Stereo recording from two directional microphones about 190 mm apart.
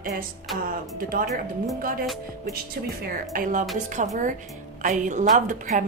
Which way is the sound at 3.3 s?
45° right (ahead or behind).